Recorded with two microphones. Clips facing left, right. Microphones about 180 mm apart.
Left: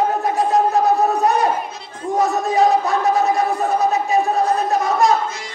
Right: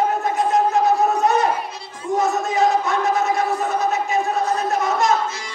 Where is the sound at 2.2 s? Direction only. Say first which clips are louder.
Left 3 dB; 35° left (ahead or behind).